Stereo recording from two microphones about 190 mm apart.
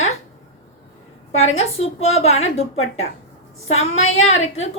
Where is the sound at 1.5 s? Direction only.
35° left (ahead or behind).